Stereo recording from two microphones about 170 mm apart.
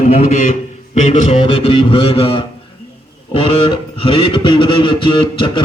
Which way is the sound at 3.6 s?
30° left (ahead or behind).